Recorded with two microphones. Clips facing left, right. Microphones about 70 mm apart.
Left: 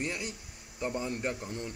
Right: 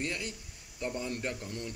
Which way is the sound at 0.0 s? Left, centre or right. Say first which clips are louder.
Left 1 dB; centre.